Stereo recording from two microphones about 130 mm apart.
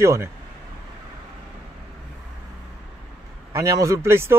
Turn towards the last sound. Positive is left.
turn(degrees=-20)  # may be behind; listen again after turning